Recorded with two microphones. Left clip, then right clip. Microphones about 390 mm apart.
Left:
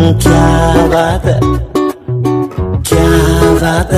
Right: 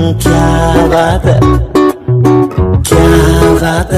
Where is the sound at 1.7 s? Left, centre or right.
Right.